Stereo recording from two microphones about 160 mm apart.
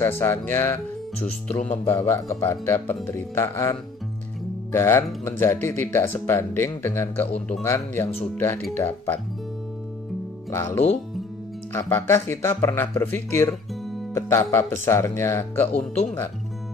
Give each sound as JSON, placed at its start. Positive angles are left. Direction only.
{"t": 0.0, "sound": "speech", "side_deg": 15}
{"t": 2.0, "sound": "speech", "side_deg": 20}
{"t": 4.7, "sound": "speech", "side_deg": 15}
{"t": 10.5, "sound": "speech", "side_deg": 15}
{"t": 15.7, "sound": "speech", "side_deg": 40}